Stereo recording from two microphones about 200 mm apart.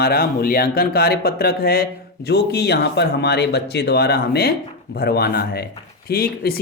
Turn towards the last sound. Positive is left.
turn(degrees=50)  # may be behind; listen again after turning